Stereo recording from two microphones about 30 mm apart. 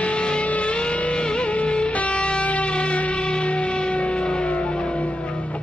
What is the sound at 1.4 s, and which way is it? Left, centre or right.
Music, left.